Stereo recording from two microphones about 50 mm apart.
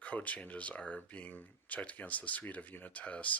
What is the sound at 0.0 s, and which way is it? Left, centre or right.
Speech, left.